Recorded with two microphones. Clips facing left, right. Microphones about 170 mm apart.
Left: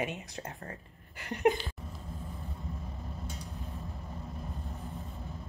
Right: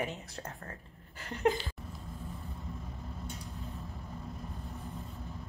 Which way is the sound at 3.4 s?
20° left (ahead or behind).